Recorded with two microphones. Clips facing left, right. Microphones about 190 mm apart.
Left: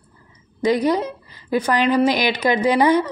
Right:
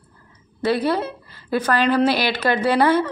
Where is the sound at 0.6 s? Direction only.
15° left (ahead or behind).